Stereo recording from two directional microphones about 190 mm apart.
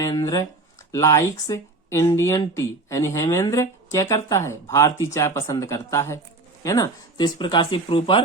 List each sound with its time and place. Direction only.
0.0 s speech: 20° left (ahead or behind)